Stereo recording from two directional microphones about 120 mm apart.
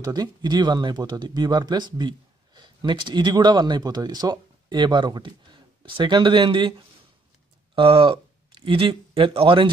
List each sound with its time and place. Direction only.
0.0 s speech: 35° right (ahead or behind)
7.7 s speech: 50° right (ahead or behind)